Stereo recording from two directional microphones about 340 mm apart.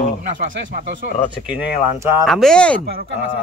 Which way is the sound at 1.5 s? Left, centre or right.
Centre.